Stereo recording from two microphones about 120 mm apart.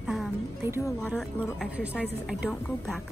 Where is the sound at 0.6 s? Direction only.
20° right (ahead or behind).